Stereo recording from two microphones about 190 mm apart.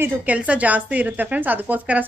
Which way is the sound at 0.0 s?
10° right (ahead or behind).